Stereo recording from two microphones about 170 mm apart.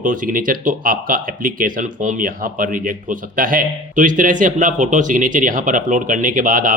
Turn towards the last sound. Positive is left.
turn(degrees=-50)  # may be behind; listen again after turning